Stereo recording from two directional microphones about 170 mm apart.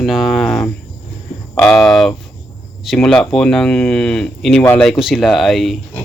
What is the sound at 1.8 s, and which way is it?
Speech, centre (ahead or behind).